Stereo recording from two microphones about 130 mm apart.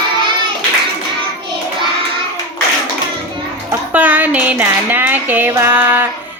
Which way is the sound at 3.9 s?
10° right (ahead or behind).